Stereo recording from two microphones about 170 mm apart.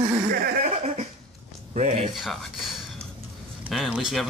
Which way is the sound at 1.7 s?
45° right (ahead or behind).